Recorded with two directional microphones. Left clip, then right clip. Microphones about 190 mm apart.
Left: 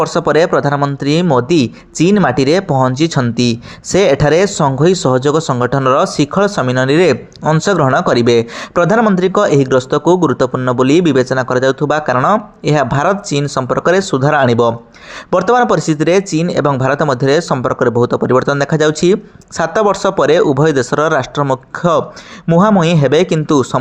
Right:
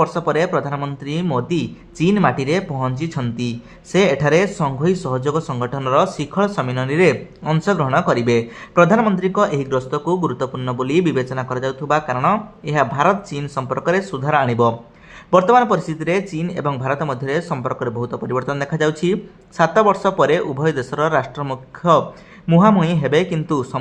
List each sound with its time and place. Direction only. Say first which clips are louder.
0.0 s speech: left 6 dB; 30° left (ahead or behind)